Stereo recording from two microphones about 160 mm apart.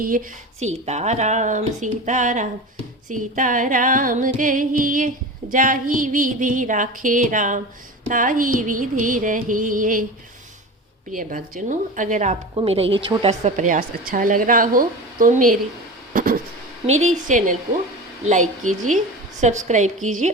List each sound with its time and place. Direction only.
0.0 s music: 65° right (ahead or behind)
0.6 s speech: 45° right (ahead or behind)
3.1 s music: 55° right (ahead or behind)
11.1 s speech: 60° right (ahead or behind)
12.5 s speech: 35° right (ahead or behind)
13.6 s music: 55° right (ahead or behind)
16.1 s a sound: 60° right (ahead or behind)
16.8 s speech: 45° right (ahead or behind)